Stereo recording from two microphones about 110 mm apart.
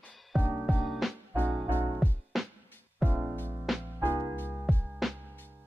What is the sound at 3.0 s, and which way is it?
Music, 15° right (ahead or behind).